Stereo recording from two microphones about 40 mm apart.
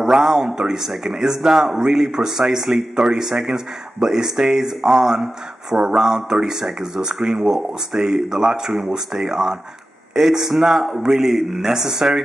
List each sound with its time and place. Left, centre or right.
0.0 s a man's voice: centre